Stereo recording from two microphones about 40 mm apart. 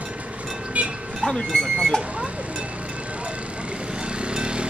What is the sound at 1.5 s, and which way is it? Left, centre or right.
Speech, centre.